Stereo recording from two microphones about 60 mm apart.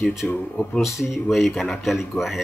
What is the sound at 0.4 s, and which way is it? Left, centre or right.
Speech, left.